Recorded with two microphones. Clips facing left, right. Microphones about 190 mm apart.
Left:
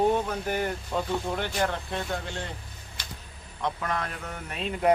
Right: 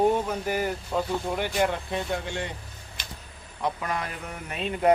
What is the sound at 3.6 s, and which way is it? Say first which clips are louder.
Speech: right 1 dB; 5° right (ahead or behind).